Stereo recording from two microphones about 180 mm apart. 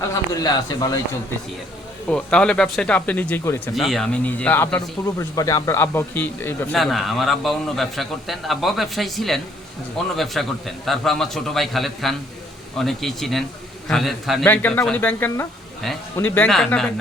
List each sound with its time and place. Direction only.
0.0 s a man's voice: 20° left (ahead or behind)
2.0 s speech: 5° left (ahead or behind)
3.8 s speech: centre (ahead or behind)
6.7 s a man's voice: centre (ahead or behind)